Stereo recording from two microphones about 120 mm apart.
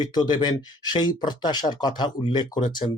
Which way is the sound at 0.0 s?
40° left (ahead or behind).